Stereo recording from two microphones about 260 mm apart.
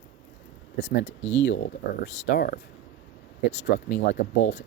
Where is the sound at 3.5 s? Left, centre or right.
Left.